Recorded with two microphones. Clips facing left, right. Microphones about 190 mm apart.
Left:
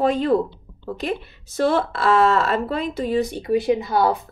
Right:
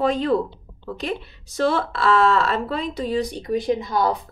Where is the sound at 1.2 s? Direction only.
50° left (ahead or behind).